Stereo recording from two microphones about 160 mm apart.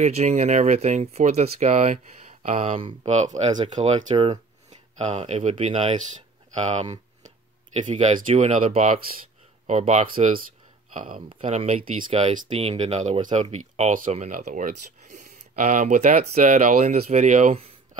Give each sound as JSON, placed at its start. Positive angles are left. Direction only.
{"t": 0.0, "sound": "speech", "side_deg": -45}
{"t": 11.8, "sound": "speech", "side_deg": -60}
{"t": 12.1, "sound": "speech", "side_deg": -40}